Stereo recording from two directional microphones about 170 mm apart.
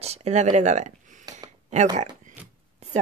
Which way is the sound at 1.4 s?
45° right (ahead or behind).